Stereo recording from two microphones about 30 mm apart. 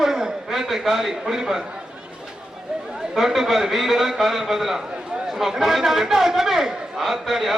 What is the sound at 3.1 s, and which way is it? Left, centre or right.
A man's voice, centre.